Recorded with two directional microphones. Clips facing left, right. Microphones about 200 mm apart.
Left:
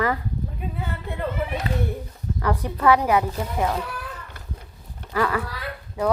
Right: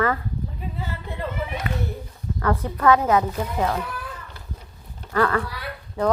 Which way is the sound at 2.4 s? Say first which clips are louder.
Right 1 dB; 15° left (ahead or behind).